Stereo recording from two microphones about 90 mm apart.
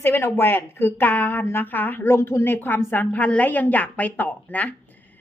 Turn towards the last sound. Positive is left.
turn(degrees=20)  # may be behind; listen again after turning